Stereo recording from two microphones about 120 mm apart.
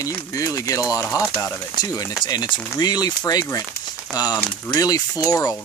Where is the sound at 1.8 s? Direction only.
30° left (ahead or behind).